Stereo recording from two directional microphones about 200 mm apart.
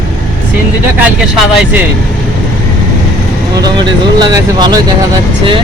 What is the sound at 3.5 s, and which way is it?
Speech, 20° right (ahead or behind).